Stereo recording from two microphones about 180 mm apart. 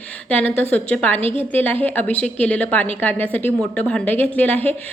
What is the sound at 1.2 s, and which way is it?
Speech, 30° right (ahead or behind).